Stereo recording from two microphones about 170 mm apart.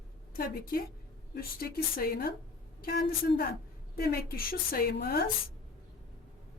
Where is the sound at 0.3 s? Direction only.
60° left (ahead or behind).